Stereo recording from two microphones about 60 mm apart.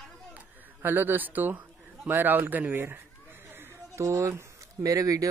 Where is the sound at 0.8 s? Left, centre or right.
Right.